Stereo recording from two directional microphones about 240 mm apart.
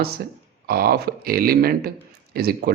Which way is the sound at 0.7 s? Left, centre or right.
Right.